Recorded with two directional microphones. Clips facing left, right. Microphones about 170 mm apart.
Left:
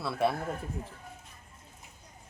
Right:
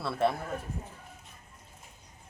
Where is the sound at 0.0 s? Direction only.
5° left (ahead or behind).